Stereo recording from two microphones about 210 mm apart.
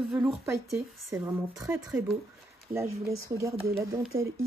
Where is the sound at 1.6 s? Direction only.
10° right (ahead or behind).